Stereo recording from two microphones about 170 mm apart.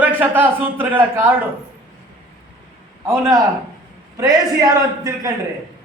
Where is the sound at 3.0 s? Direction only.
15° right (ahead or behind).